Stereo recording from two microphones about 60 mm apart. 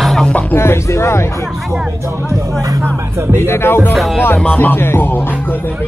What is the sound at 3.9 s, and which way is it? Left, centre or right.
Speech, centre.